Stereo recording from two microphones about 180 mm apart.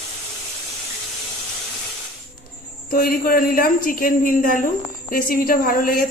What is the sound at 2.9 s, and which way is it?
A woman's voice, 55° left (ahead or behind).